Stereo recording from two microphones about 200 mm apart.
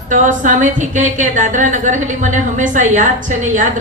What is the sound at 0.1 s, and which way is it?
A woman's voice, 40° right (ahead or behind).